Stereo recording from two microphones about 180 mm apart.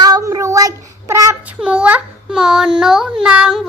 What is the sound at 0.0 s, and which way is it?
Child singing, 20° right (ahead or behind).